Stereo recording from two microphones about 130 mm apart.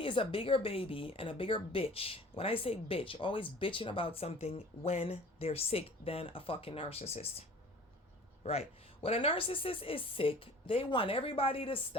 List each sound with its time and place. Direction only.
0.0 s speech: 40° left (ahead or behind)
8.4 s speech: 55° left (ahead or behind)